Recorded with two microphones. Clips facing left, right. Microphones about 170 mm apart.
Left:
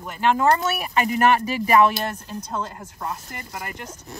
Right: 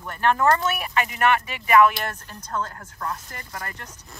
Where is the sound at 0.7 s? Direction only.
40° left (ahead or behind).